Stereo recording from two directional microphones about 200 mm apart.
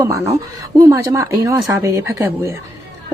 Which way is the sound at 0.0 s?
15° right (ahead or behind).